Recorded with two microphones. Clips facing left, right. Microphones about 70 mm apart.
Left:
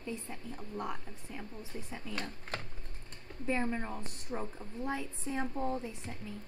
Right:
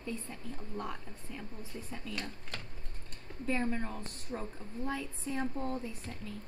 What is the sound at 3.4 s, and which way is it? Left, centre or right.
Speech, centre.